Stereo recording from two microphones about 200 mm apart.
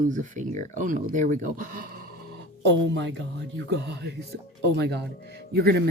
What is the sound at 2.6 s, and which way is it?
Speech, 60° right (ahead or behind).